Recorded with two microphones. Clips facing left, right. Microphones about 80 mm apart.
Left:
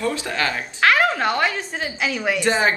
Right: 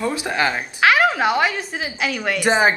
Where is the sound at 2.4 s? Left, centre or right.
Centre.